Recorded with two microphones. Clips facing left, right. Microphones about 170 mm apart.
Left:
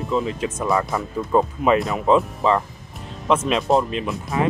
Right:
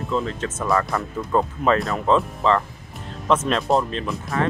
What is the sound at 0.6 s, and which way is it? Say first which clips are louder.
Speech: even; centre (ahead or behind).